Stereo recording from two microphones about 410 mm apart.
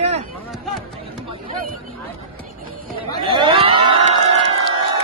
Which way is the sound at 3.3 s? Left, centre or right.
Centre.